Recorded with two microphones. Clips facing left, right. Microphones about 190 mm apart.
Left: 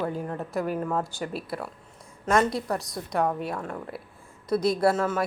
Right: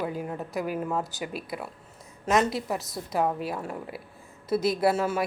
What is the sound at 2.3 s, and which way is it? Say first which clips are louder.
A woman's voice: left 1 dB; 5° right (ahead or behind).